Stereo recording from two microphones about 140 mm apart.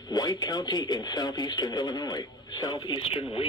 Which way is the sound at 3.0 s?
40° left (ahead or behind).